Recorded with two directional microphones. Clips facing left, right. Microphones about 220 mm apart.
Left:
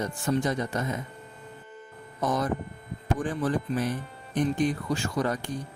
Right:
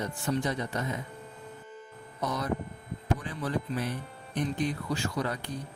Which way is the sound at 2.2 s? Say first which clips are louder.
Left 4 dB; 50° left (ahead or behind).